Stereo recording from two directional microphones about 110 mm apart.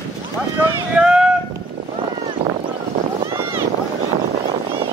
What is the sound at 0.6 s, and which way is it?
Speech, 5° right (ahead or behind).